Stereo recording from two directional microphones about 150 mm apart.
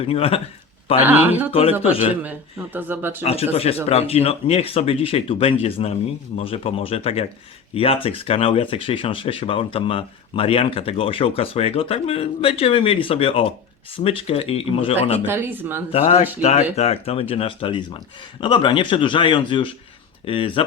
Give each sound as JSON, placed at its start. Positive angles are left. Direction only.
{"t": 0.0, "sound": "speech", "side_deg": 40}
{"t": 1.0, "sound": "speech", "side_deg": -15}
{"t": 1.8, "sound": "speech", "side_deg": 40}
{"t": 2.7, "sound": "speech", "side_deg": -15}
{"t": 3.2, "sound": "speech", "side_deg": 40}
{"t": 15.3, "sound": "speech", "side_deg": -15}
{"t": 15.9, "sound": "speech", "side_deg": 45}